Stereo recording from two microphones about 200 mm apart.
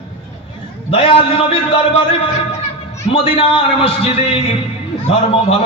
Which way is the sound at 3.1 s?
25° left (ahead or behind).